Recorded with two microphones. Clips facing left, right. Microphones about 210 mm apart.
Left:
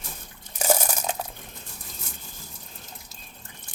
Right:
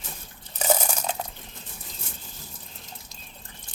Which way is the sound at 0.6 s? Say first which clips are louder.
Even; 10° left (ahead or behind).